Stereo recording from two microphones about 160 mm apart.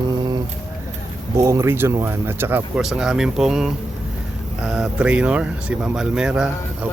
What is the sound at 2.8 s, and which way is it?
Speech, 5° right (ahead or behind).